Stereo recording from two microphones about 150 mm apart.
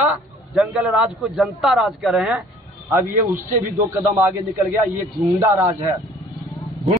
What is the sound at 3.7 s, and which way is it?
A man's voice, 15° right (ahead or behind).